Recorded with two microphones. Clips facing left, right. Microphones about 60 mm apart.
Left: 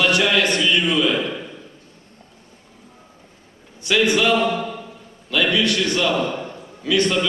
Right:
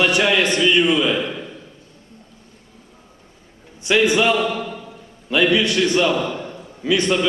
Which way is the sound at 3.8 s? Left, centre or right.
Right.